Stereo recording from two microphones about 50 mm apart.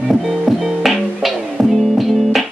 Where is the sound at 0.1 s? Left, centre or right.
Centre.